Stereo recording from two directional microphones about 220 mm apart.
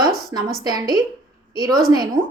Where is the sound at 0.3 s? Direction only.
15° right (ahead or behind).